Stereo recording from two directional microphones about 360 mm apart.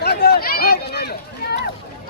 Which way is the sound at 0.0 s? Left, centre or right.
Left.